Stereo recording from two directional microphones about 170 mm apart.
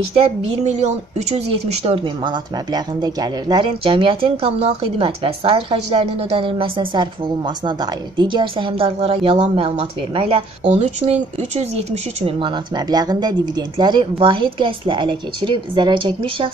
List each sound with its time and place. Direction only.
0.4 s speech: 40° right (ahead or behind)